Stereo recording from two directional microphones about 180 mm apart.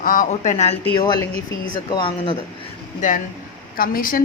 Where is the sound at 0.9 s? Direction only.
25° left (ahead or behind).